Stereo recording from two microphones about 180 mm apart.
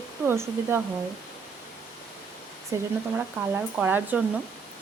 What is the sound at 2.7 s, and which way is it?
Speech, 15° right (ahead or behind).